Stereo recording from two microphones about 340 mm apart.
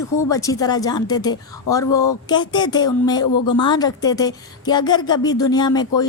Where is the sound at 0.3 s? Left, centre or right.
Centre.